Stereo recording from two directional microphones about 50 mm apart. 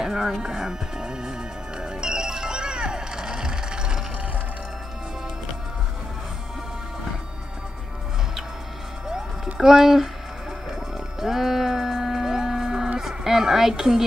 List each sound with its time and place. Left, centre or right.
0.0 s speech: centre
1.8 s music: centre
9.6 s speech: centre
10.7 s music: centre